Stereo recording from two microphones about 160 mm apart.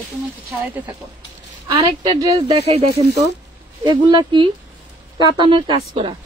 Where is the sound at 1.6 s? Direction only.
25° right (ahead or behind).